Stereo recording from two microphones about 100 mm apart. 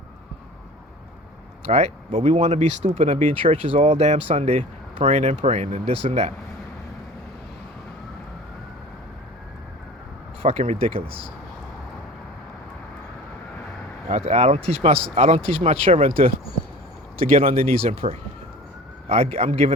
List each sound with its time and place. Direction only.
1.6 s speech: 90° right
10.4 s speech: 90° right; by 11.1 s 75° right (ahead or behind)
14.2 s speech: 90° right